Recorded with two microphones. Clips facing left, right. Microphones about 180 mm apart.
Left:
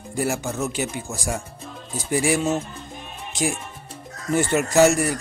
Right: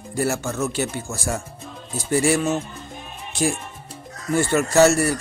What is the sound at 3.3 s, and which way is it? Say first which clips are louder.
Music: right 2 dB; 15° left (ahead or behind).